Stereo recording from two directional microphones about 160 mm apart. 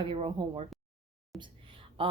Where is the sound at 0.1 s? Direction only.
30° right (ahead or behind).